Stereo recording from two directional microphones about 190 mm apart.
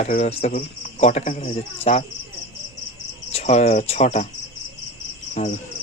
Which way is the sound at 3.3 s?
35° left (ahead or behind).